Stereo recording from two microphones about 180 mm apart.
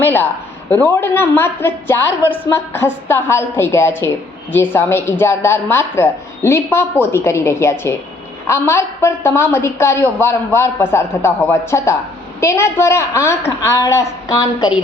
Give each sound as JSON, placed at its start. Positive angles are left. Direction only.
{"t": 0.0, "sound": "a man's voice", "side_deg": 10}